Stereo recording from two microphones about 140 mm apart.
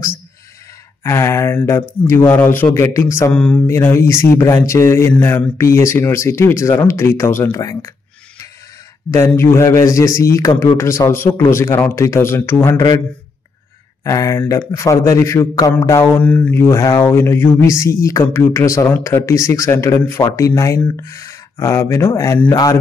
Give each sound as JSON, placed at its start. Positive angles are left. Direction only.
{"t": 1.0, "sound": "a man's voice", "side_deg": 20}
{"t": 3.3, "sound": "a man's voice", "side_deg": 5}
{"t": 3.6, "sound": "a man's voice", "side_deg": 20}
{"t": 9.3, "sound": "a man's voice", "side_deg": 15}
{"t": 14.0, "sound": "a man's voice", "side_deg": 20}